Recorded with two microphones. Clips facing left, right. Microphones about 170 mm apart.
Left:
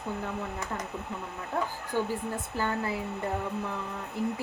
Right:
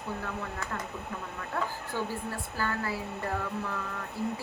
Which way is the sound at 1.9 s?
20° left (ahead or behind).